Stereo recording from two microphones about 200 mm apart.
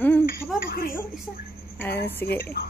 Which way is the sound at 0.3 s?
50° left (ahead or behind).